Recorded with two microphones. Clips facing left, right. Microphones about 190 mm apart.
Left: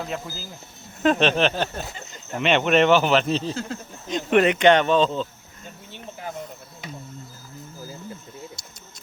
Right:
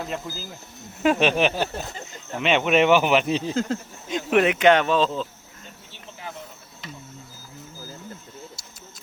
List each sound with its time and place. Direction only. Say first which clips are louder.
1.0 s speech: even; 10° right (ahead or behind)